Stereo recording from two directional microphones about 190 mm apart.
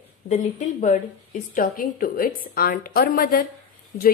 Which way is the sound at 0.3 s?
40° left (ahead or behind).